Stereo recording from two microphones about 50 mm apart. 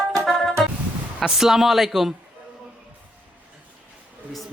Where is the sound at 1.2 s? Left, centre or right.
Centre.